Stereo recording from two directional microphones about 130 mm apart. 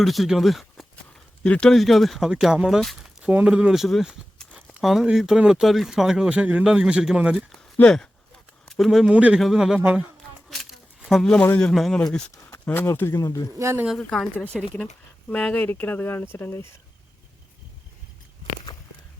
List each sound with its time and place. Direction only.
0.0 s speech: centre (ahead or behind)
7.8 s speech: 5° left (ahead or behind); by 10.1 s 10° right (ahead or behind)
10.5 s a sound: centre (ahead or behind)
11.4 s speech: 10° left (ahead or behind)
11.7 s speech: centre (ahead or behind)
12.6 s speech: 20° left (ahead or behind)
13.6 s speech: 20° right (ahead or behind)
14.0 s speech: 5° left (ahead or behind)